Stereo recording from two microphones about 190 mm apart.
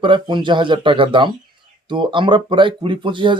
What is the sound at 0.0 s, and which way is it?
Speech, 25° right (ahead or behind).